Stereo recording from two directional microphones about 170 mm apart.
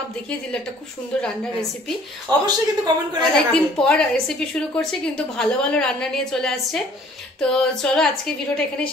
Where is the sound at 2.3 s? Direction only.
25° right (ahead or behind).